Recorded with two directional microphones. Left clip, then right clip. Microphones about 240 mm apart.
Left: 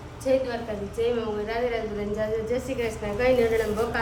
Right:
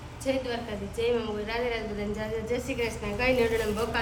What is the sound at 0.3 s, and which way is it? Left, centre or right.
A man's voice, centre.